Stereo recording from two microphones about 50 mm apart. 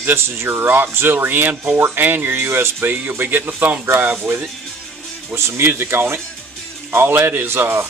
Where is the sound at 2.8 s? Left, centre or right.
Right.